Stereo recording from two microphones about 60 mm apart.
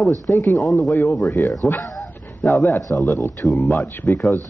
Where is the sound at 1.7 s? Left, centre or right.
Left.